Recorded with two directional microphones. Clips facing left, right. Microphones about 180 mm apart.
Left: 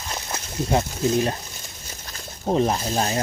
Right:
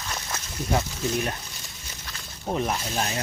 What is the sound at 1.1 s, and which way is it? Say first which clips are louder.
Speech: left 6 dB; 30° left (ahead or behind).